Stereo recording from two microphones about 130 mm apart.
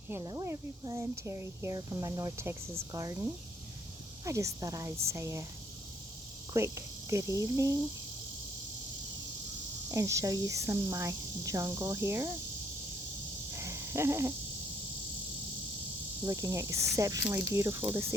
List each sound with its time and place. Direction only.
0.1 s speech: 30° right (ahead or behind)
4.3 s speech: 25° right (ahead or behind)
6.5 s speech: 25° right (ahead or behind)
9.9 s speech: 25° right (ahead or behind)
13.5 s a sound: 20° right (ahead or behind)
16.2 s speech: 25° right (ahead or behind)